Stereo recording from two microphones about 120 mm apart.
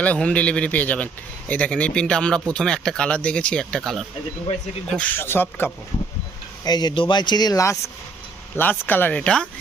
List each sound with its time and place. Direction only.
0.0 s speech: 10° left (ahead or behind)
4.9 s speech: 15° left (ahead or behind)
6.7 s speech: 35° left (ahead or behind); by 9.5 s 5° left (ahead or behind)